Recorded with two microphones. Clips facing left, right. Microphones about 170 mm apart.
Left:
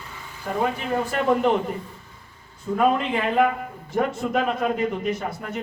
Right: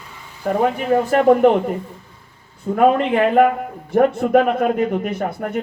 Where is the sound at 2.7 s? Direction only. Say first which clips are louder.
Right 6 dB; 55° right (ahead or behind).